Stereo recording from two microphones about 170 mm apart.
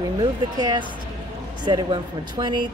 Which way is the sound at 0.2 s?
25° right (ahead or behind).